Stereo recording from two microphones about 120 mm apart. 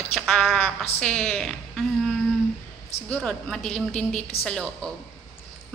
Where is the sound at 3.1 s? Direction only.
5° left (ahead or behind).